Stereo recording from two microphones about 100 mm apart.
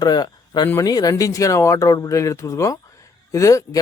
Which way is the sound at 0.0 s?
45° left (ahead or behind).